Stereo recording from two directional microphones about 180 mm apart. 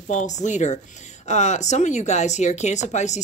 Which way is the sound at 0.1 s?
40° left (ahead or behind).